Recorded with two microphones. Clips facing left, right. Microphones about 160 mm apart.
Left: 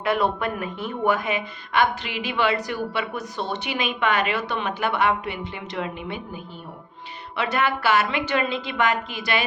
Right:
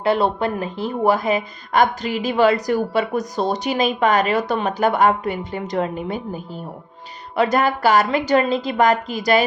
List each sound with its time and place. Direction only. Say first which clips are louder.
0.0 s speech: right 4 dB; 30° right (ahead or behind)